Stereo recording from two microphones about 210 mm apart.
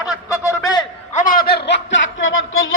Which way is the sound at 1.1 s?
40° left (ahead or behind).